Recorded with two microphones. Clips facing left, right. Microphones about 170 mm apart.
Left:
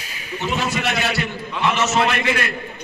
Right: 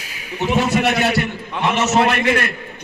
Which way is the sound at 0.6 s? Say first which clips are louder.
Right 7 dB; 55° right (ahead or behind).